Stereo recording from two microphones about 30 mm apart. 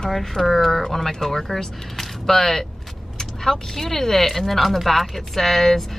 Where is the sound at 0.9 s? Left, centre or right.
Centre.